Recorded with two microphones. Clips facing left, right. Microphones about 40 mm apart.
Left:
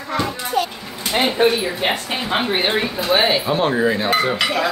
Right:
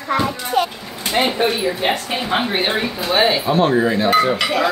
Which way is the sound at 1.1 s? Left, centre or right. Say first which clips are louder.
Left 1 dB; centre.